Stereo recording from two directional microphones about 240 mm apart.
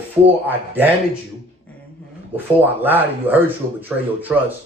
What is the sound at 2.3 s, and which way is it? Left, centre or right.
Speech, centre.